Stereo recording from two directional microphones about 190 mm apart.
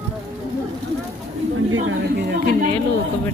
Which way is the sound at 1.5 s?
90° right.